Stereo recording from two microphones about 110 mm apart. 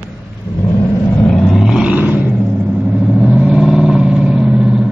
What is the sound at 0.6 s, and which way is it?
Vehicle, 30° left (ahead or behind).